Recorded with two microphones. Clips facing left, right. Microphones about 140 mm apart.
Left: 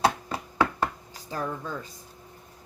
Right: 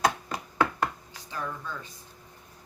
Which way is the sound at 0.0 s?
30° left (ahead or behind).